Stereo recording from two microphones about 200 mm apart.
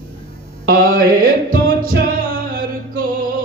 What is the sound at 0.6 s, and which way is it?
Music, 45° right (ahead or behind).